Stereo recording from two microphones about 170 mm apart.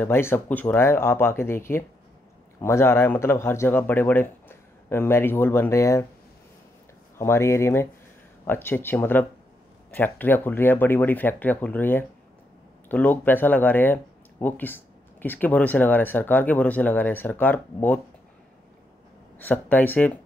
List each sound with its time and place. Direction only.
0.0 s speech: 15° left (ahead or behind)
7.2 s speech: 15° left (ahead or behind)
19.3 s speech: 10° left (ahead or behind)